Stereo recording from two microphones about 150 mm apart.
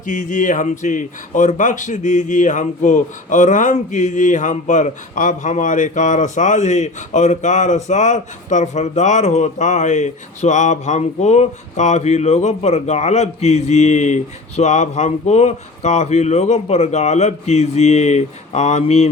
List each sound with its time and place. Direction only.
0.0 s speech: 60° left (ahead or behind)